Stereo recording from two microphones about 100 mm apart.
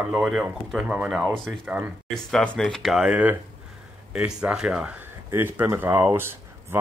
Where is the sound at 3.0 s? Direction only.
15° right (ahead or behind).